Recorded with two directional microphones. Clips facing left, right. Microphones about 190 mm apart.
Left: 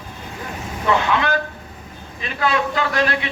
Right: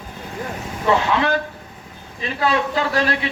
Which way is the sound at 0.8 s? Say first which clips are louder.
Right 1 dB; 35° right (ahead or behind).